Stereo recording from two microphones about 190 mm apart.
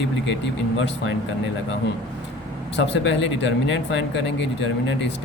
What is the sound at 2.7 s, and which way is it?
Speech, 65° left (ahead or behind).